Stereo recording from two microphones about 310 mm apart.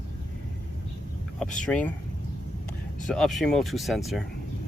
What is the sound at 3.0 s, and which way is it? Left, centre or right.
Speech, centre.